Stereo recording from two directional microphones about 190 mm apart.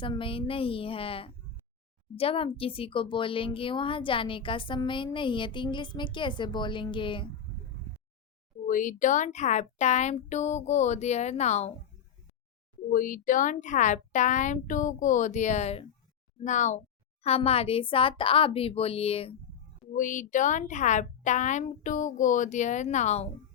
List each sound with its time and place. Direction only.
0.0 s a woman's voice: 25° left (ahead or behind)
8.6 s a woman's voice: 45° left (ahead or behind)
12.9 s a woman's voice: 45° left (ahead or behind); by 19.4 s 30° left (ahead or behind)
19.9 s a woman's voice: 45° left (ahead or behind)